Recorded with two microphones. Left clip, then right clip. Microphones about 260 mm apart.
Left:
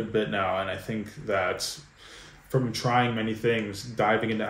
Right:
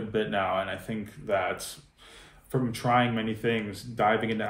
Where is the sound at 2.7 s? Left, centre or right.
Centre.